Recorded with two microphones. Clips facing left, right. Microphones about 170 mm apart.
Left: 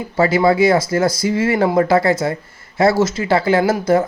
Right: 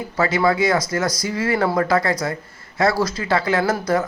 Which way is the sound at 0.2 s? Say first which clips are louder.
Left 5 dB; 25° left (ahead or behind).